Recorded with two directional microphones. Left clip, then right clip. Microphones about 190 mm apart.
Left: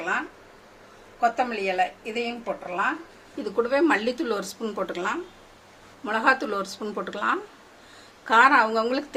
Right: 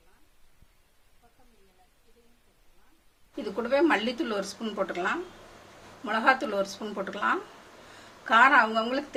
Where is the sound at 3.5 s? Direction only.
45° left (ahead or behind).